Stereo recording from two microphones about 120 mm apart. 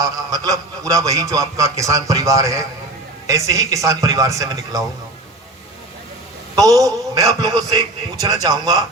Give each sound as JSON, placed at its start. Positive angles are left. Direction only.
{"t": 0.0, "sound": "a man's voice", "side_deg": -30}
{"t": 6.6, "sound": "a man's voice", "side_deg": -30}